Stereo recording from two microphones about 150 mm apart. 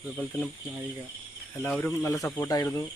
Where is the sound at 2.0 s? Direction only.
20° left (ahead or behind).